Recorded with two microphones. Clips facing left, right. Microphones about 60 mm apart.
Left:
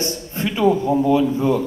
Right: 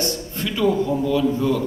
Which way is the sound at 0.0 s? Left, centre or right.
Left.